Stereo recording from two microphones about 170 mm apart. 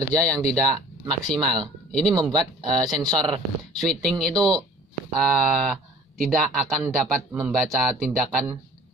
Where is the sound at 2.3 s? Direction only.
25° right (ahead or behind).